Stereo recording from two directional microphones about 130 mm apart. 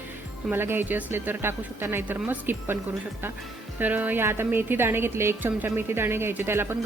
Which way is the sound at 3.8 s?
15° right (ahead or behind).